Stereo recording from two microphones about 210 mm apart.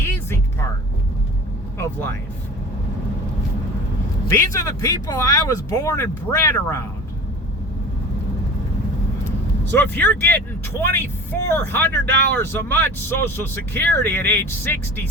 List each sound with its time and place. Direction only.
1.8 s speech: 10° left (ahead or behind)
4.3 s speech: 15° left (ahead or behind)
9.7 s speech: 10° left (ahead or behind)